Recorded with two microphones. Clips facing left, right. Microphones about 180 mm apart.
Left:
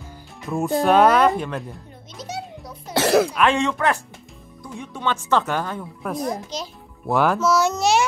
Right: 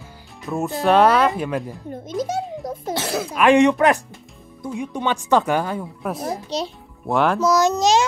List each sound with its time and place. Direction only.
0.5 s speech: centre (ahead or behind)
1.9 s a child's voice: 50° right (ahead or behind)
2.9 s speech: 70° left (ahead or behind)
3.3 s speech: 15° right (ahead or behind)
6.2 s a child's voice: 30° right (ahead or behind)
7.1 s speech: centre (ahead or behind)
7.3 s speech: 15° right (ahead or behind)